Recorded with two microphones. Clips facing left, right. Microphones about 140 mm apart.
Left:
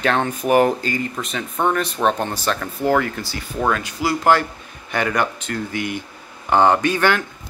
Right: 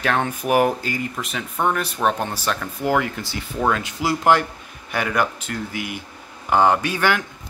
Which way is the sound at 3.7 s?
25° right (ahead or behind).